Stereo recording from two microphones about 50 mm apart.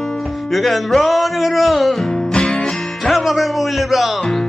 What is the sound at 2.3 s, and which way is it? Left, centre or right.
Music, centre.